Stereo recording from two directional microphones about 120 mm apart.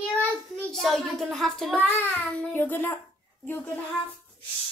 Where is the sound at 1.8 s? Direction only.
10° left (ahead or behind).